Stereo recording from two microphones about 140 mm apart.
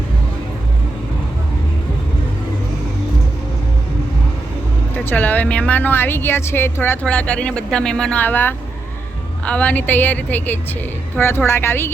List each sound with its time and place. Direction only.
4.9 s a woman's voice: 10° left (ahead or behind)